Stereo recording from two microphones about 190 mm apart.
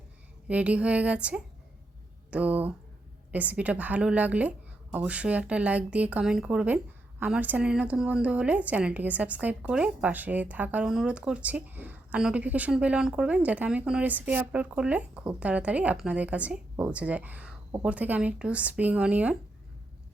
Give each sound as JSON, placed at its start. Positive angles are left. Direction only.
{"t": 0.4, "sound": "a woman's voice", "side_deg": -5}